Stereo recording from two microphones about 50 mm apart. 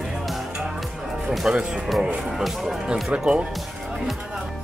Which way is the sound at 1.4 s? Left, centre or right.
Centre.